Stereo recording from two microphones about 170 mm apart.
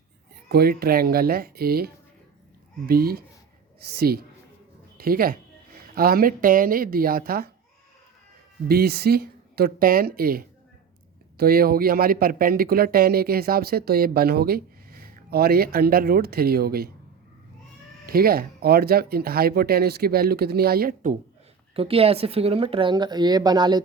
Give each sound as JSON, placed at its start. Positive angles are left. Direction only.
{"t": 0.4, "sound": "a woman's voice", "side_deg": -65}
{"t": 8.6, "sound": "speech", "side_deg": -65}
{"t": 18.0, "sound": "speech", "side_deg": -60}
{"t": 21.8, "sound": "speech", "side_deg": -35}